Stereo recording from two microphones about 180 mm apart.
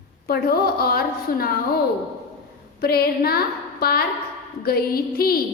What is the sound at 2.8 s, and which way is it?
A woman's voice, 60° left (ahead or behind).